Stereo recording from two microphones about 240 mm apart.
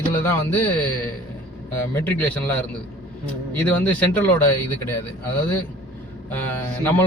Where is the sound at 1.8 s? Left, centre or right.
Centre.